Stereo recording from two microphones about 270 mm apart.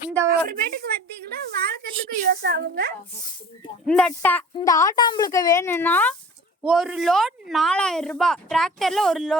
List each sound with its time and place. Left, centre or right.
0.3 s a woman's voice: right
3.8 s speech: centre